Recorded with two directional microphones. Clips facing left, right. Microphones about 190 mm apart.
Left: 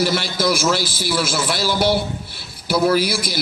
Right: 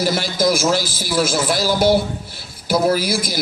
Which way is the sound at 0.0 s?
45° right (ahead or behind).